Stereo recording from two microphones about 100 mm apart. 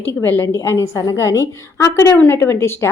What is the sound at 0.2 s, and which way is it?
A woman's voice, 25° left (ahead or behind).